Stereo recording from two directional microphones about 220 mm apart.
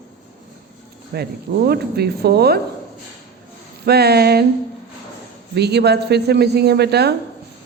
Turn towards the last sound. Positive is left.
turn(degrees=-50)  # may be behind; listen again after turning